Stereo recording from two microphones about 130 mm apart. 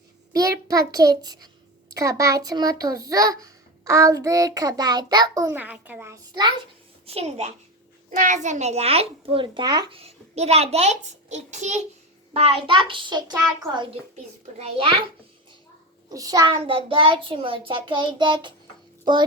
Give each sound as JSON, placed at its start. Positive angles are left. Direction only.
{"t": 0.3, "sound": "child singing", "side_deg": -25}
{"t": 1.9, "sound": "a child's voice", "side_deg": -25}
{"t": 5.5, "sound": "a child's voice", "side_deg": -10}
{"t": 7.0, "sound": "a child's voice", "side_deg": -50}
{"t": 8.1, "sound": "a child's voice", "side_deg": -80}
{"t": 10.0, "sound": "a child's voice", "side_deg": -50}
{"t": 12.3, "sound": "child singing", "side_deg": -50}
{"t": 14.2, "sound": "a child's voice", "side_deg": -45}
{"t": 16.0, "sound": "a child's voice", "side_deg": -30}
{"t": 16.6, "sound": "a child's voice", "side_deg": -45}